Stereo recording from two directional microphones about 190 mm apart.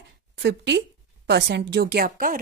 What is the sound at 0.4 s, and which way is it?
A woman's voice, 65° right (ahead or behind).